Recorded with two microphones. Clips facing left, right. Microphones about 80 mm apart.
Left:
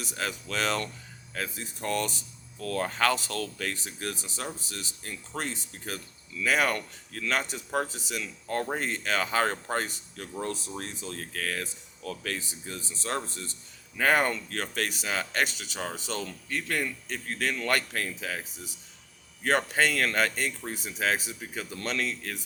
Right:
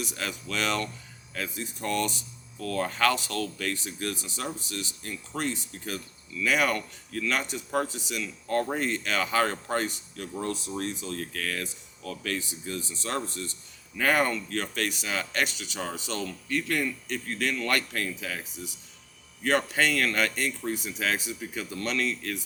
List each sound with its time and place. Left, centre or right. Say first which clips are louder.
0.0 s speech: even; left